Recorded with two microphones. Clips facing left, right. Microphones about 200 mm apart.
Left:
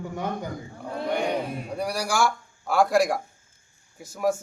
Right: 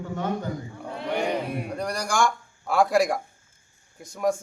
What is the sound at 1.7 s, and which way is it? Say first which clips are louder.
A man's voice: left 2 dB; 5° left (ahead or behind).